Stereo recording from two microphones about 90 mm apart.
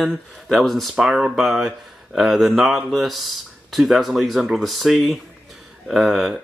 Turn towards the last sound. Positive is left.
turn(degrees=0)  # may be behind; listen again after turning